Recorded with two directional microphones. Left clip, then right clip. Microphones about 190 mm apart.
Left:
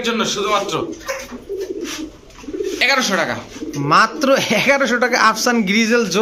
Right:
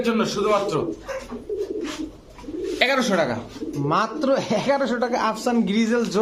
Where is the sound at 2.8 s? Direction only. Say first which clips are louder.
Left 4 dB; 45° right (ahead or behind).